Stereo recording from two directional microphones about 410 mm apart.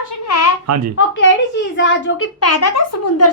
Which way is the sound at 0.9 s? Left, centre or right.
Left.